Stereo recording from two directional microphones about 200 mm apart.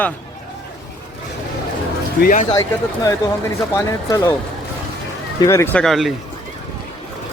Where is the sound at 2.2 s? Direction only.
40° left (ahead or behind).